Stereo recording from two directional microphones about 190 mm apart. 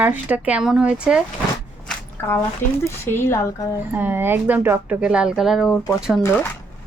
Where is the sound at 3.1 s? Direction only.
15° left (ahead or behind).